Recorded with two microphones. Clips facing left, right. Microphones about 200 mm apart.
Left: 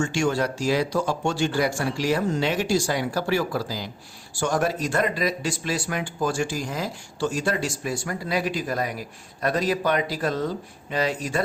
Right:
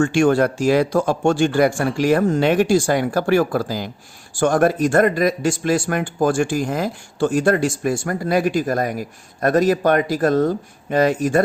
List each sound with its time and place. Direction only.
0.0 s speech: 55° right (ahead or behind)